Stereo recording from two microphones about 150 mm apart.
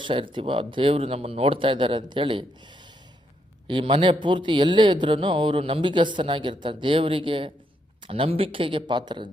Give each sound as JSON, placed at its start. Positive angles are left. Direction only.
{"t": 0.0, "sound": "speech", "side_deg": -35}